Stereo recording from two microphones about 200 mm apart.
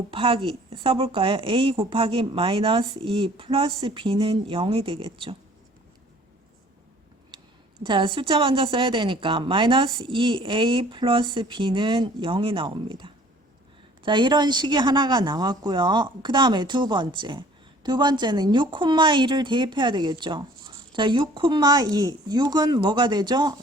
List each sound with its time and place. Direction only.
0.1 s speech: 25° right (ahead or behind)
7.3 s a sound: 25° right (ahead or behind)
7.9 s speech: 25° right (ahead or behind)